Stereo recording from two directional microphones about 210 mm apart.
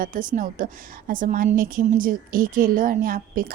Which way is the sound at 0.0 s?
40° right (ahead or behind).